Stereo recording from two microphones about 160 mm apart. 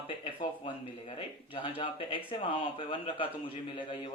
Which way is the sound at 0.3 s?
35° left (ahead or behind).